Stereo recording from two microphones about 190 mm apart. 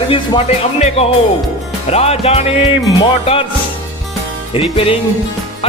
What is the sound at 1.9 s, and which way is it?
Music, 35° left (ahead or behind).